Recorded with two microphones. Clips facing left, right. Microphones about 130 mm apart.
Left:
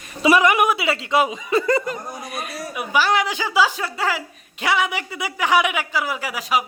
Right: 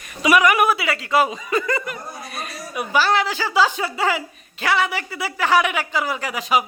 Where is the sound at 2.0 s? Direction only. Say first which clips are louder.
Left 2 dB; 15° left (ahead or behind).